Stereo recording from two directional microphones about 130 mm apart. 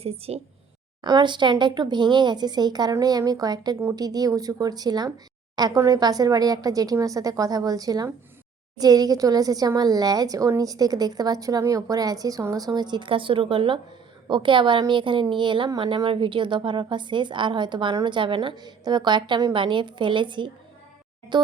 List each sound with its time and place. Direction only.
0.0 s a woman's voice: 50° right (ahead or behind)
1.0 s a woman's voice: 35° right (ahead or behind)